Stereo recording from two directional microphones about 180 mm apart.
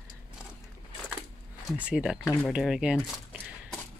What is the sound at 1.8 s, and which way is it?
Speech, 5° right (ahead or behind).